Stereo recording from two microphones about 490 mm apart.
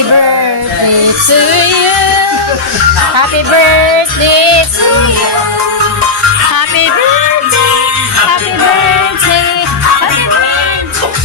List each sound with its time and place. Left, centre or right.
1.4 s music: right
3.2 s music: right
4.2 s music: right